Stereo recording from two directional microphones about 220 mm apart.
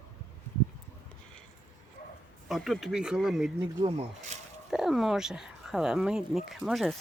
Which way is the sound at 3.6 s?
25° right (ahead or behind).